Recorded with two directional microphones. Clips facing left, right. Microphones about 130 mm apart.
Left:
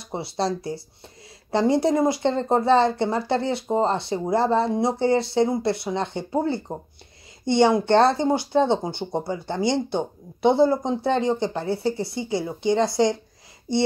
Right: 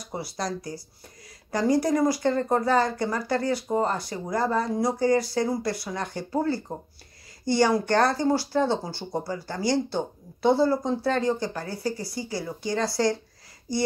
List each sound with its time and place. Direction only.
0.0 s speech: 25° left (ahead or behind)